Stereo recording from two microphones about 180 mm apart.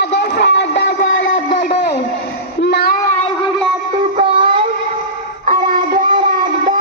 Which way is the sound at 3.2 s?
30° left (ahead or behind).